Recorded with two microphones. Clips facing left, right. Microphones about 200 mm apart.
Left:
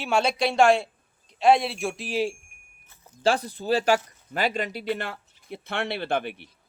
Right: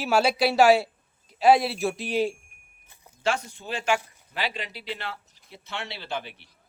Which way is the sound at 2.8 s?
15° right (ahead or behind).